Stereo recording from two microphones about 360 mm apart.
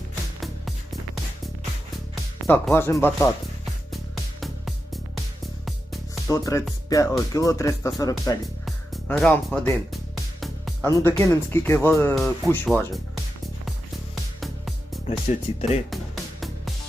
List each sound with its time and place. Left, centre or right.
0.3 s music: centre
2.5 s speech: centre
3.9 s music: centre
5.6 s speech: centre
15.3 s speech: centre